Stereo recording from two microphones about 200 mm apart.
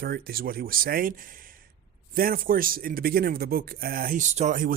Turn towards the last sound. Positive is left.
turn(degrees=-40)  # may be behind; listen again after turning